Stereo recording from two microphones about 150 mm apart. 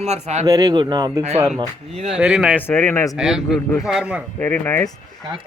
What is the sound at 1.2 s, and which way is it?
Speech, 45° right (ahead or behind).